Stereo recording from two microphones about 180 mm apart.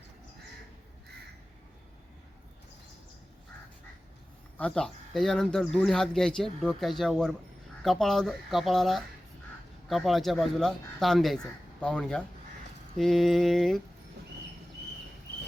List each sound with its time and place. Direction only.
4.5 s speech: 5° left (ahead or behind)